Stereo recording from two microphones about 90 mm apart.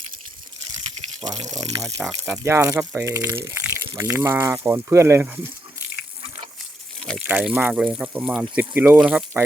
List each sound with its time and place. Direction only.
1.2 s speech: 45° right (ahead or behind)
2.2 s speech: 30° right (ahead or behind)
7.2 s speech: 15° right (ahead or behind)
9.0 s speech: 10° right (ahead or behind)